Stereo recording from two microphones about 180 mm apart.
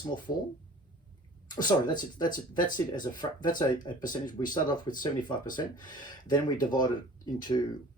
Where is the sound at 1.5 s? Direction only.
25° left (ahead or behind).